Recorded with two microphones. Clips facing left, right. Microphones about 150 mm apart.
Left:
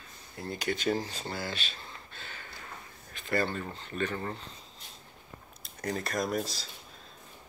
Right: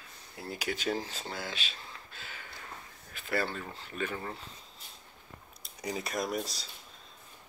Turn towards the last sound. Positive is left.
turn(degrees=0)  # may be behind; listen again after turning